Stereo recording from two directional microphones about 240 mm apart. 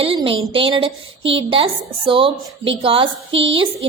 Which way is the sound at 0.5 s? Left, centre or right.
Right.